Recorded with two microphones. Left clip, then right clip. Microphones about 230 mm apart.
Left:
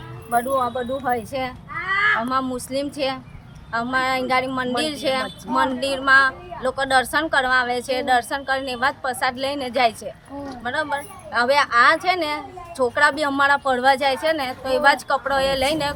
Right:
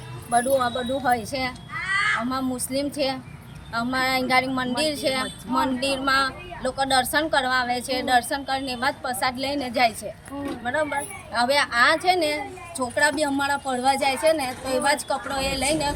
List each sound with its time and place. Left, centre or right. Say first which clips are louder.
0.3 s a woman's voice: even; centre
1.8 s a sound: left 4 dB; left
2.3 s a woman's voice: left 4 dB; centre